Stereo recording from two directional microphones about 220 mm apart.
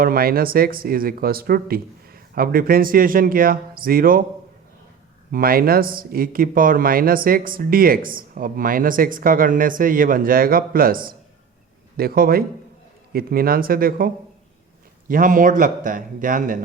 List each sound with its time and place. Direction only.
0.0 s speech: 45° right (ahead or behind)
5.3 s a man's voice: 40° right (ahead or behind)